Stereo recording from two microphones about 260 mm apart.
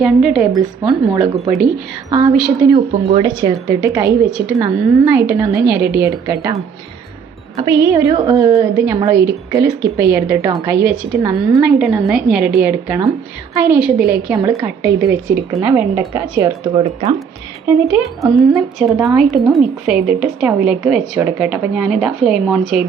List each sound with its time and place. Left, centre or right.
0.0 s a woman's voice: centre
2.0 s a woman's voice: right
2.3 s a woman's voice: centre
2.6 s a woman's voice: centre